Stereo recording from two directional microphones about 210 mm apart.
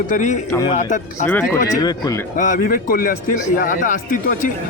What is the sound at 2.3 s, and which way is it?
Speech, 40° left (ahead or behind).